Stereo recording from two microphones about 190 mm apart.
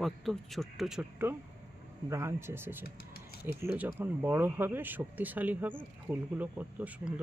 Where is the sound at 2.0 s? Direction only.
15° right (ahead or behind).